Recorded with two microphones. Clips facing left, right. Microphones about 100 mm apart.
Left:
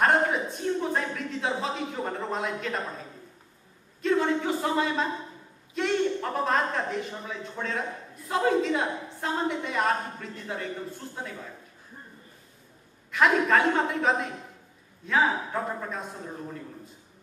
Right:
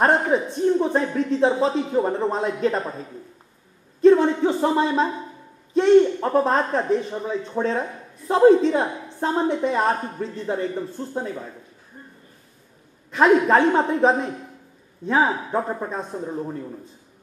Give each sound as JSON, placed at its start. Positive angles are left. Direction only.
{"t": 0.0, "sound": "speech", "side_deg": -30}
{"t": 4.0, "sound": "speech", "side_deg": -30}
{"t": 13.1, "sound": "speech", "side_deg": -30}